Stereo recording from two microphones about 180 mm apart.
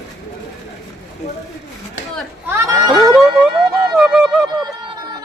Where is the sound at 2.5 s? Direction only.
15° right (ahead or behind).